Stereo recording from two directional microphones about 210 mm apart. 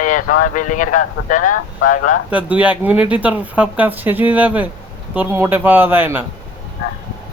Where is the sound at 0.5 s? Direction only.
40° left (ahead or behind).